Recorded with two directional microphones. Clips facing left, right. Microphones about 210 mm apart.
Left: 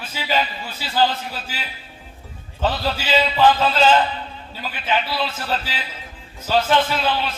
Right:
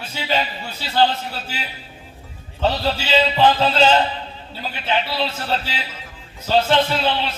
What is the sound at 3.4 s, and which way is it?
A man's voice, 30° right (ahead or behind).